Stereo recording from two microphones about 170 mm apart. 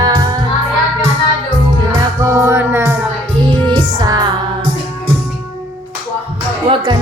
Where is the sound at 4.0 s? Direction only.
25° right (ahead or behind).